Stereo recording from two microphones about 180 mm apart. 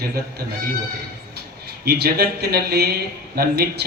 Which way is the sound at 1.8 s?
60° right (ahead or behind).